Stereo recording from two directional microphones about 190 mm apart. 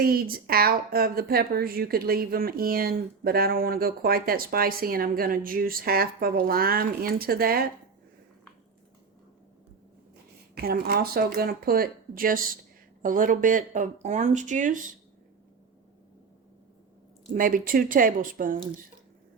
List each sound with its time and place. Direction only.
0.0 s a woman's voice: 50° right (ahead or behind)
10.5 s a woman's voice: 55° right (ahead or behind)
17.3 s a woman's voice: 45° right (ahead or behind)